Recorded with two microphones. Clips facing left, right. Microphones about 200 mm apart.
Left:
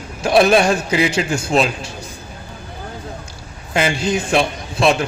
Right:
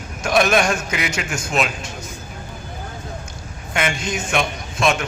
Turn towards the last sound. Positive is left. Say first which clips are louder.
# left 4 dB
turn(degrees=35)  # may be behind; listen again after turning